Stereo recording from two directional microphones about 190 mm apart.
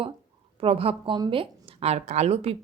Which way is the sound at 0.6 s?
30° right (ahead or behind).